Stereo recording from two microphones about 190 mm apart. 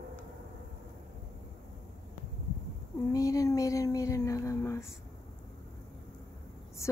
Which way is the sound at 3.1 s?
15° left (ahead or behind).